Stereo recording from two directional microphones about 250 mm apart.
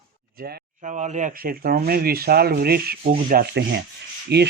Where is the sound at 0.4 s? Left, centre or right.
Right.